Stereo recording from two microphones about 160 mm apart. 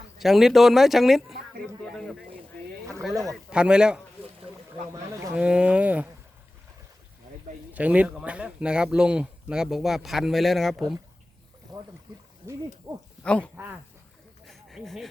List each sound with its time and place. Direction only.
0.2 s speech: centre (ahead or behind)
3.5 s speech: 5° right (ahead or behind)
5.3 s speech: 5° right (ahead or behind)
7.7 s speech: 10° right (ahead or behind)
11.7 s pour: 25° right (ahead or behind)
12.9 s speech: 15° right (ahead or behind)
13.2 s speech: 5° left (ahead or behind)
14.4 s a sound: centre (ahead or behind)